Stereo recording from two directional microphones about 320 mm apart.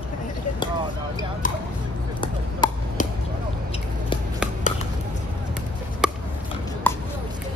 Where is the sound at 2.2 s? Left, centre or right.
Centre.